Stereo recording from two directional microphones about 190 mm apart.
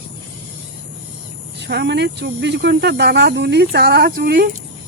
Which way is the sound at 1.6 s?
65° right (ahead or behind).